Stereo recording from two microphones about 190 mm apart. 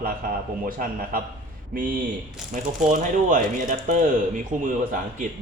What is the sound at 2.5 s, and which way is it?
Speech, 45° right (ahead or behind).